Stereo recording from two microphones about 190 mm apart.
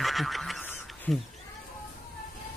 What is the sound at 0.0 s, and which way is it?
Frog, centre (ahead or behind).